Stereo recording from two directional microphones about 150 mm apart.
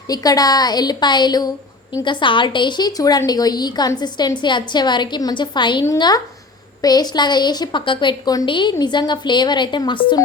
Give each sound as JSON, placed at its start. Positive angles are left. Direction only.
{"t": 0.1, "sound": "a woman's voice", "side_deg": 25}